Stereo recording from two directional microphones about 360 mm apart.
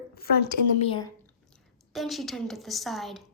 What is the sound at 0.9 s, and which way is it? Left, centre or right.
Speech, centre.